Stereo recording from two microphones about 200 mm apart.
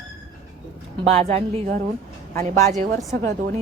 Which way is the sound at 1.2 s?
30° right (ahead or behind).